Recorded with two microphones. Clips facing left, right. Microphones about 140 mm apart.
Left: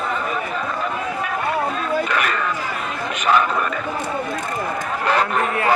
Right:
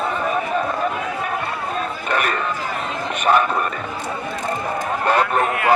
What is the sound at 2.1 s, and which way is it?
Chatter, 40° right (ahead or behind).